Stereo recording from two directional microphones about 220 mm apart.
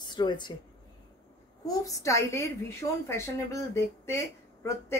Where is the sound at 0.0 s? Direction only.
20° left (ahead or behind).